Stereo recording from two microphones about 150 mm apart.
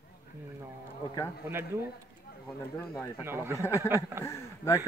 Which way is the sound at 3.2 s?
15° right (ahead or behind).